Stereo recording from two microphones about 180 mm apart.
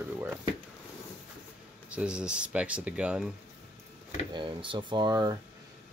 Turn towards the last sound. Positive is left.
turn(degrees=-20)  # may be behind; listen again after turning